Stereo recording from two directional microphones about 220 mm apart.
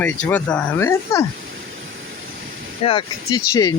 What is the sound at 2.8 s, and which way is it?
Speech, 20° left (ahead or behind).